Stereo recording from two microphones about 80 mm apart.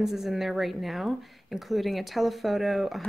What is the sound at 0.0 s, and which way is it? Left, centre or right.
Speech, centre.